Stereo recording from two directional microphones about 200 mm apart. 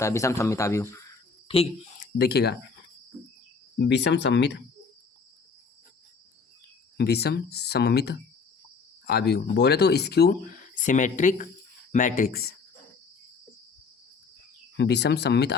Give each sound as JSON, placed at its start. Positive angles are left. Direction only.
{"t": 0.0, "sound": "speech", "side_deg": 15}
{"t": 2.0, "sound": "speech", "side_deg": 50}
{"t": 3.8, "sound": "speech", "side_deg": 60}
{"t": 6.9, "sound": "speech", "side_deg": 55}
{"t": 14.8, "sound": "speech", "side_deg": 55}